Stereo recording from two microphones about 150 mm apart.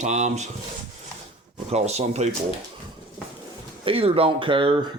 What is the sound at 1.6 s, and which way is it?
Speech, 45° right (ahead or behind).